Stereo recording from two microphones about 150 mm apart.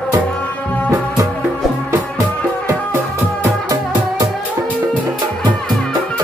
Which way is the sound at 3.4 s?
25° right (ahead or behind).